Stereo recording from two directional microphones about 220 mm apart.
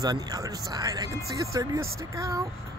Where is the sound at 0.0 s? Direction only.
15° right (ahead or behind).